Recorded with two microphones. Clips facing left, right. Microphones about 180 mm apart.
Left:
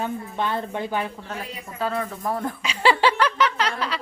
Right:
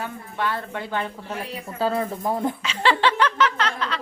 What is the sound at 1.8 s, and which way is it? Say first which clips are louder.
Speech: right 3 dB; 30° right (ahead or behind).